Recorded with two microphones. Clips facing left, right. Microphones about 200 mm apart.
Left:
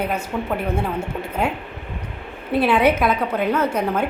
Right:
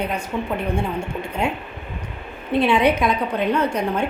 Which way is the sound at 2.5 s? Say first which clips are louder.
Even; 5° left (ahead or behind).